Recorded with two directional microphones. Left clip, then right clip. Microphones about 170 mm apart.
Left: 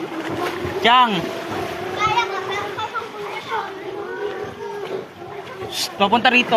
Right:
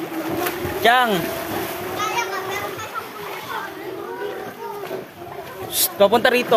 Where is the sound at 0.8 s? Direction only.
35° right (ahead or behind).